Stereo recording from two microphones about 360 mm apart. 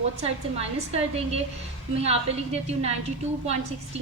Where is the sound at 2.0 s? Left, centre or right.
Centre.